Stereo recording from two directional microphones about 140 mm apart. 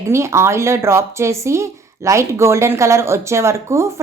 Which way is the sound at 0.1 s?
20° right (ahead or behind).